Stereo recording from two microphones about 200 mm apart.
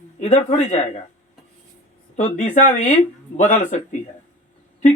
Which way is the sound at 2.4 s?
40° left (ahead or behind).